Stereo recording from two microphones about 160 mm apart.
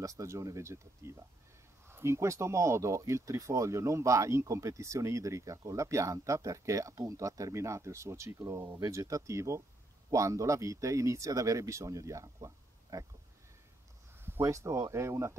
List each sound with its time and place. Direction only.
0.0 s speech: 20° right (ahead or behind)
14.2 s speech: 15° right (ahead or behind)